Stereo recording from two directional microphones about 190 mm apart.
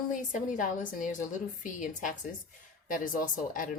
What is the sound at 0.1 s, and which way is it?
Speech, 45° left (ahead or behind).